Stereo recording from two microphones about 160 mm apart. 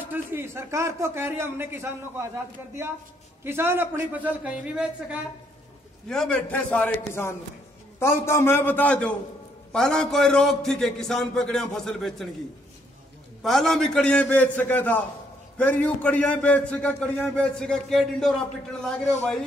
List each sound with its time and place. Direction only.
0.0 s a man's voice: 15° right (ahead or behind)
6.0 s a man's voice: 5° left (ahead or behind)
13.4 s a man's voice: centre (ahead or behind)